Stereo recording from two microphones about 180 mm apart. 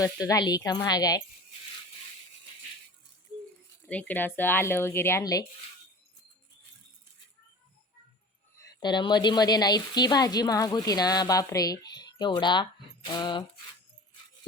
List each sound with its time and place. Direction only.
0.0 s speech: 20° left (ahead or behind)
3.8 s speech: 10° left (ahead or behind)
8.5 s speech: 20° left (ahead or behind)